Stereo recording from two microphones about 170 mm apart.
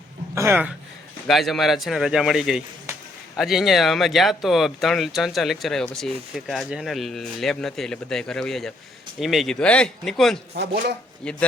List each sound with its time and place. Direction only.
0.3 s speech: 10° right (ahead or behind)
1.3 s speech: centre (ahead or behind)
10.5 s speech: 75° right (ahead or behind)
11.2 s a man's voice: 5° left (ahead or behind)